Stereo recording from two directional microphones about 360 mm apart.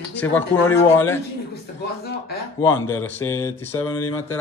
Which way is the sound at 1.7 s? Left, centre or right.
Left.